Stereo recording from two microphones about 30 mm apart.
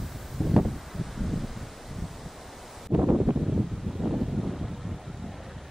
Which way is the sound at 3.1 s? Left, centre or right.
Right.